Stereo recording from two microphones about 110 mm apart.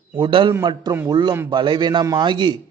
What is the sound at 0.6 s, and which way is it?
Speech, 40° right (ahead or behind).